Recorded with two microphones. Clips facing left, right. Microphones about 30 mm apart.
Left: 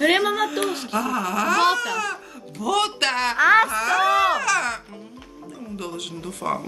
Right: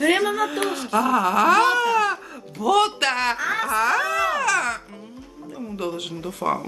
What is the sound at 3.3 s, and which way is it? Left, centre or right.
Speech, left.